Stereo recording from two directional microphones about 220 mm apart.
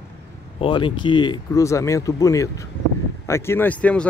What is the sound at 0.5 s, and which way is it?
Speech, 25° left (ahead or behind).